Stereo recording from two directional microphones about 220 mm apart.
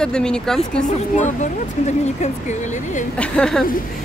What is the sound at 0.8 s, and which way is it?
Speech, 35° left (ahead or behind).